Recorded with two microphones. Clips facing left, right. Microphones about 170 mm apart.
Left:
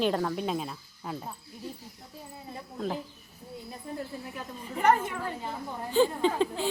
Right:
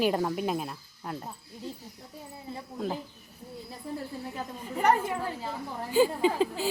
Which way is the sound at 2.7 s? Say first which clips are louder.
Even; 5° right (ahead or behind).